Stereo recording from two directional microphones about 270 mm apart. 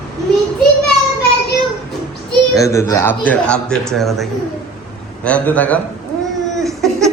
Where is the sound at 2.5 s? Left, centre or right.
Centre.